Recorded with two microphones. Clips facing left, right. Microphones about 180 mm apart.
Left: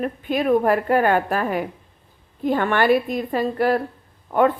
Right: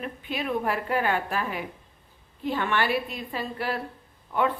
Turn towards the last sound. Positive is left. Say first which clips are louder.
# left 8 dB
turn(degrees=50)  # may be behind; listen again after turning